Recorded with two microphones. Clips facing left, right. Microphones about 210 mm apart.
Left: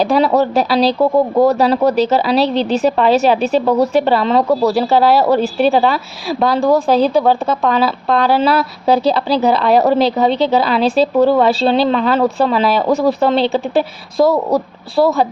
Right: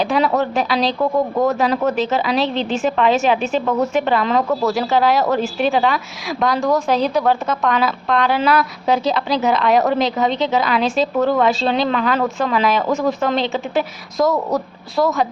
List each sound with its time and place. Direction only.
0.0 s a woman's voice: 35° left (ahead or behind)